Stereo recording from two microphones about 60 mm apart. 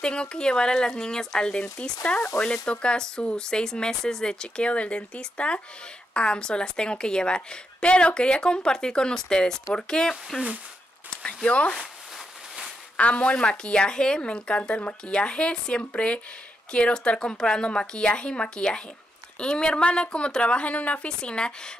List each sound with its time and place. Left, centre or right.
0.0 s a woman's voice: centre
12.9 s a woman's voice: left